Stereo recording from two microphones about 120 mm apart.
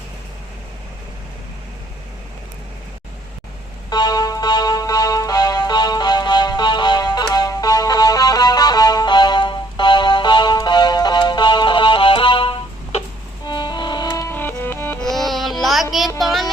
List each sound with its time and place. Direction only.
3.8 s music: 35° left (ahead or behind)
13.5 s music: 40° left (ahead or behind)
14.3 s music: 15° left (ahead or behind)
15.0 s music: centre (ahead or behind)